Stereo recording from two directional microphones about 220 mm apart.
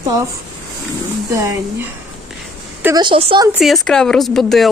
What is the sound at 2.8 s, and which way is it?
Speech, 20° right (ahead or behind).